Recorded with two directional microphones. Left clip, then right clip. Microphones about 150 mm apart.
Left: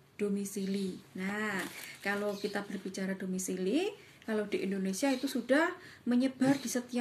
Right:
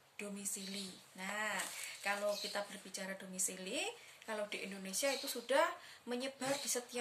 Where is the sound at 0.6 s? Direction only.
15° right (ahead or behind).